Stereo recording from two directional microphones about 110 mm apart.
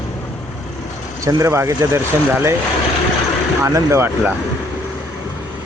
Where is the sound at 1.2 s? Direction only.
25° right (ahead or behind).